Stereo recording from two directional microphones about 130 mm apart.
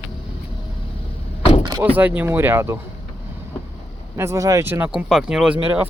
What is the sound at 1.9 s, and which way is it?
Speech, 15° right (ahead or behind).